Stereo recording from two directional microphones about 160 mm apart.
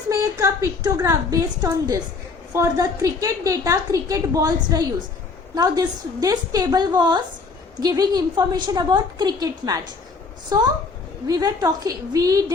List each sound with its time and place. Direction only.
0.1 s a woman's voice: 20° right (ahead or behind)